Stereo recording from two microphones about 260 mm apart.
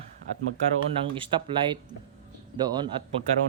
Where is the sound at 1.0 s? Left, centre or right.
Centre.